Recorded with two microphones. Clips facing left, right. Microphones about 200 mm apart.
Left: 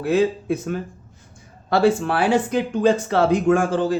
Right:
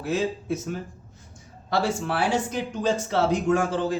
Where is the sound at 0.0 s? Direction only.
60° left (ahead or behind).